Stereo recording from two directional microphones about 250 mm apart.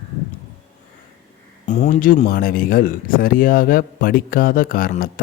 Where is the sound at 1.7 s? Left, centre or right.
Left.